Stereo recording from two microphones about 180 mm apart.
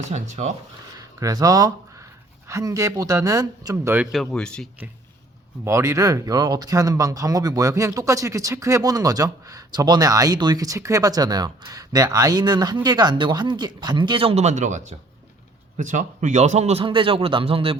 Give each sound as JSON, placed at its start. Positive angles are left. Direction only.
{"t": 0.0, "sound": "a man's voice", "side_deg": -40}
{"t": 0.9, "sound": "a sound", "side_deg": -20}
{"t": 2.5, "sound": "speech", "side_deg": -15}
{"t": 3.9, "sound": "speech", "side_deg": -5}
{"t": 5.6, "sound": "a man's voice", "side_deg": -15}